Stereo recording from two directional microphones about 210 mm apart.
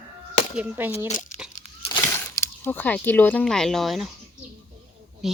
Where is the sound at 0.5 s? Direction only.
10° right (ahead or behind).